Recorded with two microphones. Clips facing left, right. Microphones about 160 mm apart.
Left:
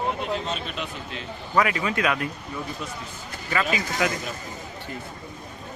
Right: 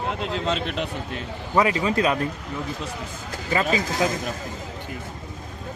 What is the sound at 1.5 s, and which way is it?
Speech, 30° right (ahead or behind).